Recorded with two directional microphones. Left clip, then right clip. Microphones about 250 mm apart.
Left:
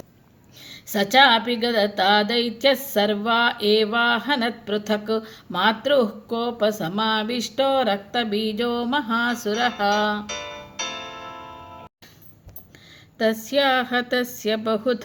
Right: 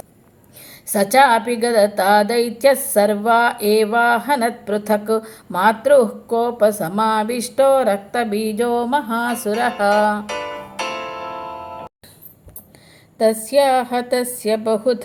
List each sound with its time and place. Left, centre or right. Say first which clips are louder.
0.6 s speech: right 5 dB; centre
10.2 s music: right 6 dB; right
13.6 s speech: right 4 dB; centre